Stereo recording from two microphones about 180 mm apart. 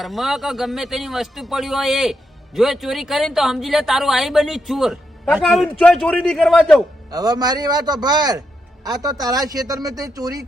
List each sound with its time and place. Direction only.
0.0 s speech: centre (ahead or behind)
7.1 s speech: 20° right (ahead or behind)